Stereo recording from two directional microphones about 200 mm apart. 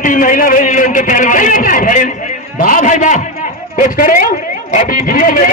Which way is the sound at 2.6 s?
40° left (ahead or behind).